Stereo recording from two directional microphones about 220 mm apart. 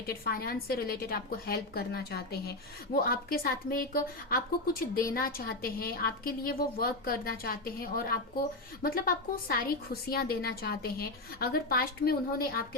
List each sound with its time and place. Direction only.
0.1 s a woman's voice: 40° left (ahead or behind)